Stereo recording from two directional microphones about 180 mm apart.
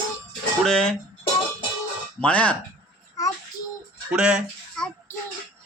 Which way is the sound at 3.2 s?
20° left (ahead or behind).